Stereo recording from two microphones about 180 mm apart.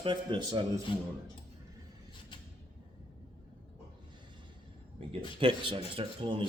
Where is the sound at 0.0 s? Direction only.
25° right (ahead or behind).